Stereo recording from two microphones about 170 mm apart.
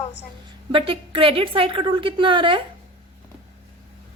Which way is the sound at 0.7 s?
30° right (ahead or behind).